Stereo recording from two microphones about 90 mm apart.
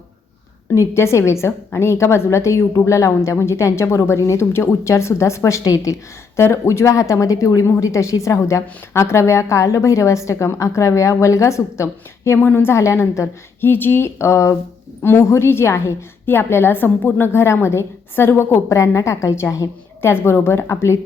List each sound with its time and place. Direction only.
0.7 s a woman's voice: 30° left (ahead or behind)